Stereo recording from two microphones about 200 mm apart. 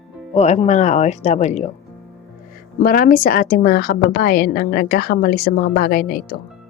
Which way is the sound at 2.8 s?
45° left (ahead or behind).